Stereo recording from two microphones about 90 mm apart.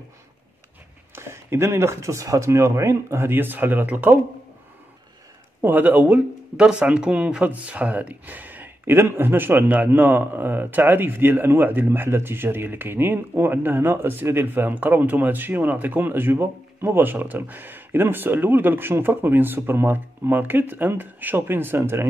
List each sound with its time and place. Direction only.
1.1 s speech: 30° right (ahead or behind)
5.6 s speech: 20° right (ahead or behind)